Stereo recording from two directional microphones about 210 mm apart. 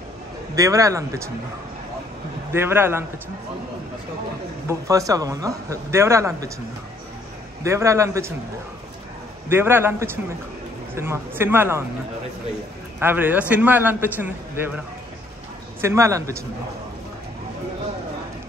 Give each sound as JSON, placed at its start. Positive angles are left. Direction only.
{"t": 0.6, "sound": "speech", "side_deg": -15}
{"t": 2.5, "sound": "speech", "side_deg": -10}
{"t": 4.6, "sound": "speech", "side_deg": -15}
{"t": 7.6, "sound": "speech", "side_deg": -15}
{"t": 9.5, "sound": "speech", "side_deg": -10}
{"t": 13.0, "sound": "speech", "side_deg": -10}
{"t": 15.8, "sound": "speech", "side_deg": -15}